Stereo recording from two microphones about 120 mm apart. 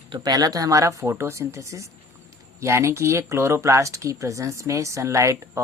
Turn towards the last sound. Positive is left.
turn(degrees=-25)  # may be behind; listen again after turning